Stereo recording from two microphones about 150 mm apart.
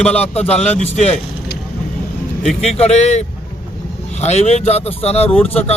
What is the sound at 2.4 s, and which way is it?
Speech, 45° left (ahead or behind).